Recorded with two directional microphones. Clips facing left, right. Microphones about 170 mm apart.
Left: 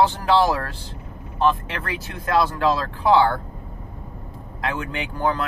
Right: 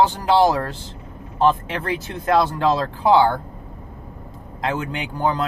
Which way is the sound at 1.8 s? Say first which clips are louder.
Right 7 dB; 20° right (ahead or behind).